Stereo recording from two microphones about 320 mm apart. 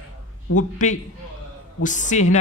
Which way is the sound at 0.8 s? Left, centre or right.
Left.